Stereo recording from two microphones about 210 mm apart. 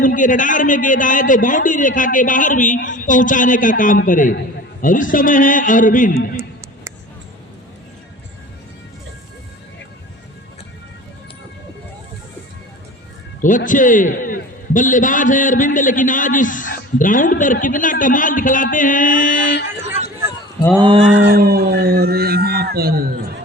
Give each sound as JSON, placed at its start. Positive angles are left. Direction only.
{"t": 0.0, "sound": "a man's voice", "side_deg": 40}
{"t": 13.7, "sound": "a man's voice", "side_deg": 40}
{"t": 20.7, "sound": "mantra", "side_deg": -25}
{"t": 21.0, "sound": "speech", "side_deg": -55}